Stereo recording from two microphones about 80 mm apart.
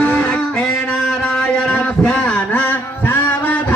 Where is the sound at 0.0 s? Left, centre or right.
Centre.